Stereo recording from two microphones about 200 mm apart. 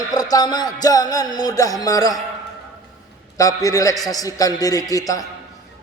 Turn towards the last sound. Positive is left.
turn(degrees=15)  # may be behind; listen again after turning